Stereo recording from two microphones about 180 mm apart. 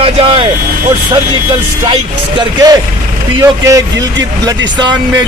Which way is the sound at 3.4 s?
20° right (ahead or behind).